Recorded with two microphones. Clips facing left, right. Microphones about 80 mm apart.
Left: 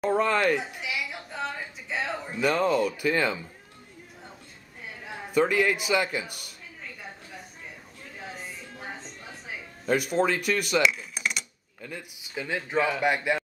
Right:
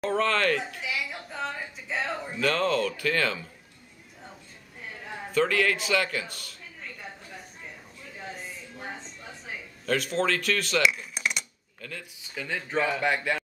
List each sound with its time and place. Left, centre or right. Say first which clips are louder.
0.1 s speech: left 1 dB; centre
2.4 s a man's voice: left 2 dB; centre
4.8 s a sound: right 1 dB; centre
5.3 s a man's voice: left 1 dB; centre
6.8 s a sound: even; centre
8.2 s music: even; centre
9.8 s a man's voice: left 2 dB; centre
10.8 s a sound: even; centre
11.8 s a man's voice: left 1 dB; centre